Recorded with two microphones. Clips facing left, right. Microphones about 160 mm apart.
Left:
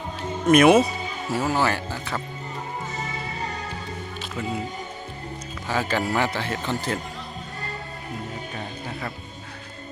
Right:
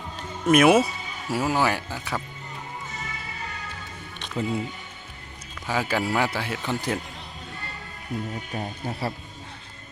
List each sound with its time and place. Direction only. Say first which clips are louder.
0.4 s speech: left 2 dB; 5° right (ahead or behind)
4.4 s speech: right 3 dB; 30° right (ahead or behind)
5.6 s speech: left 1 dB; 10° right (ahead or behind)
8.5 s speech: right 2 dB; 30° right (ahead or behind)